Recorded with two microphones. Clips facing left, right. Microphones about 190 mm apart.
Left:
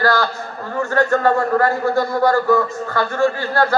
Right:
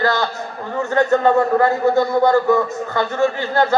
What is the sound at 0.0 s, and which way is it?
A man's voice, 20° right (ahead or behind).